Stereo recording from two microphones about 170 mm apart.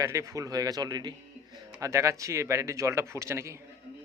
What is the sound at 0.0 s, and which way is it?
Speech, 20° right (ahead or behind).